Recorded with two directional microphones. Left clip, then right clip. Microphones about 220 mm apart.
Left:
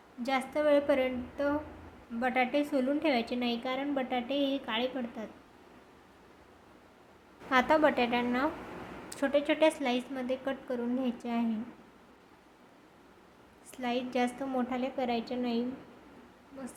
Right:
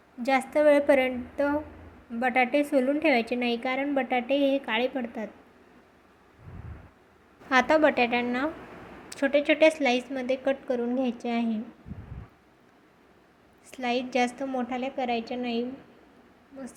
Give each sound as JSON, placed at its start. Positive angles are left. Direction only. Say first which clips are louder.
{"t": 0.2, "sound": "a woman's voice", "louder": "right 7 dB", "side_deg": -20}
{"t": 7.5, "sound": "a woman's voice", "louder": "right 4 dB", "side_deg": -15}
{"t": 13.7, "sound": "a woman's voice", "louder": "right 5 dB", "side_deg": -15}